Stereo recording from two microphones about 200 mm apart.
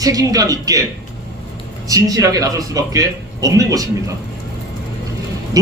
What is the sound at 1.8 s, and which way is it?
A man's voice, 15° right (ahead or behind).